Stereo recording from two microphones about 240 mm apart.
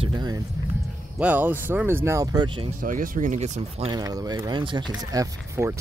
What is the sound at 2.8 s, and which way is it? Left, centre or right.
Speech, right.